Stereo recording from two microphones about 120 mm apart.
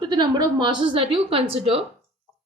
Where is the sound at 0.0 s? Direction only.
40° right (ahead or behind).